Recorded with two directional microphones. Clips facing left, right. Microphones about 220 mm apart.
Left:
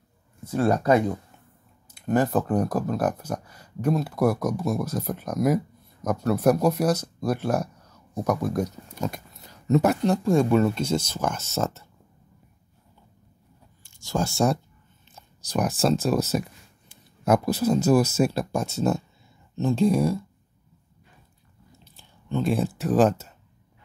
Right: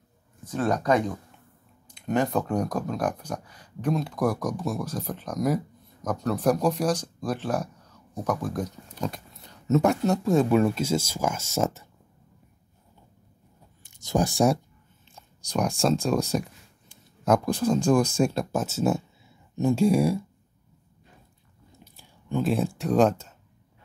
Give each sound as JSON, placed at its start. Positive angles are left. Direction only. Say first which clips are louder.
{"t": 0.5, "sound": "speech", "louder": "left 3 dB", "side_deg": 10}
{"t": 13.8, "sound": "speech", "louder": "right 2 dB", "side_deg": -20}
{"t": 15.1, "sound": "speech", "louder": "left 1 dB", "side_deg": 5}
{"t": 21.7, "sound": "chewing", "louder": "right 4 dB", "side_deg": -10}
{"t": 22.5, "sound": "speech", "louder": "left 1 dB", "side_deg": 0}